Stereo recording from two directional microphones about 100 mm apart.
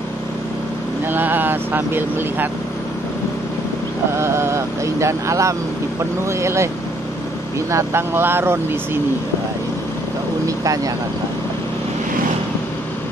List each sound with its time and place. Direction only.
1.0 s speech: 20° right (ahead or behind)
4.1 s speech: 25° right (ahead or behind)
7.7 s speech: 25° right (ahead or behind)
10.4 s vehicle: 35° right (ahead or behind)